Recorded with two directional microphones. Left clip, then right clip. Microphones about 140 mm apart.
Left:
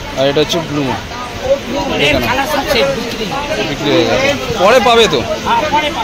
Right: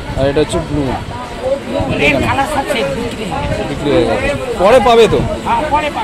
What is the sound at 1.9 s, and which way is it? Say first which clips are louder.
Speech: even; 25° right (ahead or behind).